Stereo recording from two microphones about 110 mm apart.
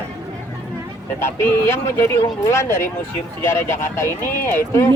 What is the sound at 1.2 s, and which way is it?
Speech, 20° left (ahead or behind).